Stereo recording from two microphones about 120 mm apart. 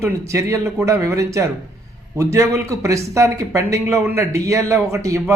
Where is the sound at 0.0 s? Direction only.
25° right (ahead or behind).